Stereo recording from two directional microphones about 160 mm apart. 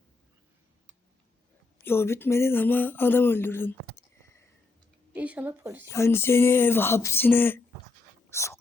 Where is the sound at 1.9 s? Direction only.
15° left (ahead or behind).